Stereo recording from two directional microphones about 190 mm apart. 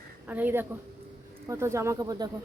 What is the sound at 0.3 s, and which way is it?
Speech, 10° right (ahead or behind).